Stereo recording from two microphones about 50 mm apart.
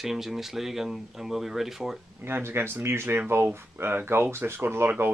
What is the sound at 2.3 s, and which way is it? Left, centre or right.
Speech, right.